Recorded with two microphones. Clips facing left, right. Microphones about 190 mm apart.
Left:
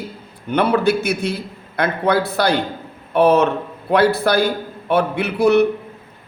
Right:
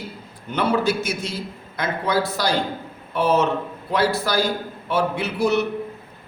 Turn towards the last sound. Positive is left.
turn(degrees=60)  # may be behind; listen again after turning